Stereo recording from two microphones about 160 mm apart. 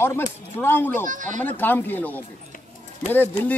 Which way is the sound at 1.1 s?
50° right (ahead or behind).